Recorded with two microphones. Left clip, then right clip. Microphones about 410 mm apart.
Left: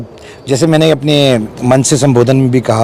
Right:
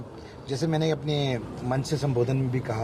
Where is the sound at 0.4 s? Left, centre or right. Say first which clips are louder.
Left 18 dB; left.